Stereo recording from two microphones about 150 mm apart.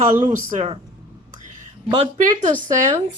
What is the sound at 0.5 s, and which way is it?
Speech, 45° right (ahead or behind).